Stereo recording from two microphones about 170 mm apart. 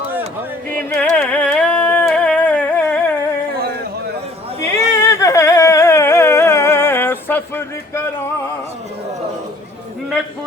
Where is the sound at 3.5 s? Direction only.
65° right (ahead or behind).